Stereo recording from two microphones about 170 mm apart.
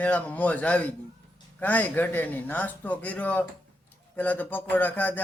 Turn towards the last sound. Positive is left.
turn(degrees=10)  # may be behind; listen again after turning